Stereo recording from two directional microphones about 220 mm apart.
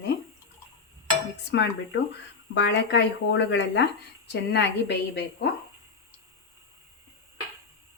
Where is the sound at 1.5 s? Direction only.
50° left (ahead or behind).